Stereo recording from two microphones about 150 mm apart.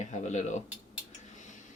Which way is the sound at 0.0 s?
50° left (ahead or behind).